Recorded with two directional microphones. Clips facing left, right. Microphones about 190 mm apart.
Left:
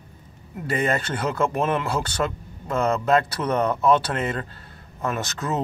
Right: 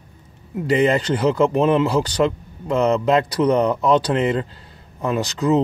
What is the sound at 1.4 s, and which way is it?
Speech, 20° right (ahead or behind).